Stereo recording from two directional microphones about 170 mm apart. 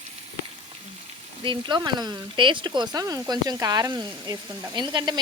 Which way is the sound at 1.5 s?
25° right (ahead or behind).